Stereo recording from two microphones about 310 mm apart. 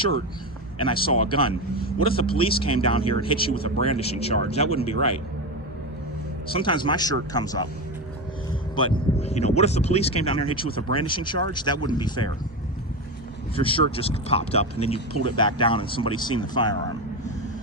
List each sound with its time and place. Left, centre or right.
1.3 s speech: centre
6.5 s speech: centre
8.7 s speech: centre
13.6 s speech: centre